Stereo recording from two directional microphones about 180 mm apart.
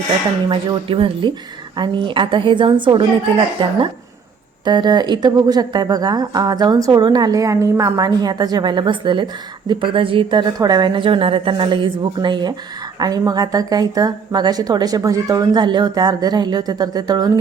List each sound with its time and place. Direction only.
0.4 s speech: 25° right (ahead or behind)